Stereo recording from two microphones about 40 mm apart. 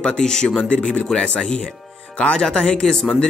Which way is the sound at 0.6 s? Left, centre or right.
Left.